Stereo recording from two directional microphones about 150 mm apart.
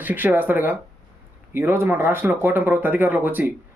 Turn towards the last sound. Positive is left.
turn(degrees=-10)  # may be behind; listen again after turning